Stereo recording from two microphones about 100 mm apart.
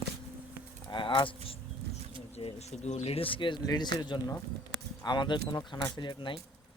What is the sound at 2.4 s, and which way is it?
Speech, 75° left (ahead or behind).